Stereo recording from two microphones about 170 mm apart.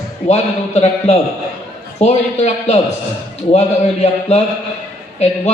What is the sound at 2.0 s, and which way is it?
Speech, 40° left (ahead or behind).